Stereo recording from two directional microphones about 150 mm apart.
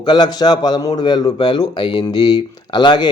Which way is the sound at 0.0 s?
30° left (ahead or behind).